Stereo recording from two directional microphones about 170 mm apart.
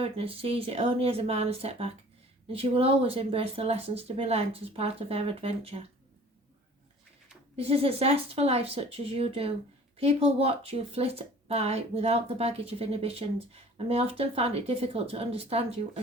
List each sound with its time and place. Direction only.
0.0 s speech: 35° right (ahead or behind)
7.5 s speech: 35° right (ahead or behind)